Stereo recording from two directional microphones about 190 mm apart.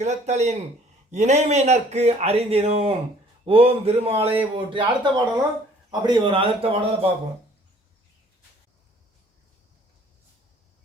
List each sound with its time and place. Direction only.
0.0 s a man's voice: 35° right (ahead or behind)